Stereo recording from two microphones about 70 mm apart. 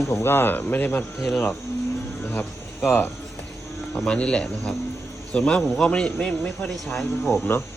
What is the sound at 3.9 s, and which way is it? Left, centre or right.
A man's voice, centre.